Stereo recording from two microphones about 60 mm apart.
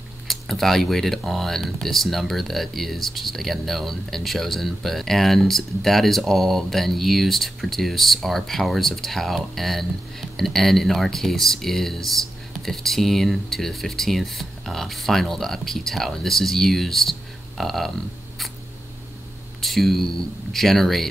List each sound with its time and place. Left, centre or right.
0.3 s speech: centre
19.6 s speech: centre